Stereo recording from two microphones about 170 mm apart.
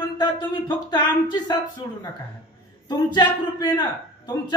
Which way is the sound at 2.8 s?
25° left (ahead or behind).